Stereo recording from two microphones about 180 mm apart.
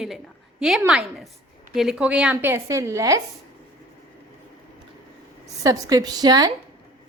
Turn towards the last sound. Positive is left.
turn(degrees=-20)  # may be behind; listen again after turning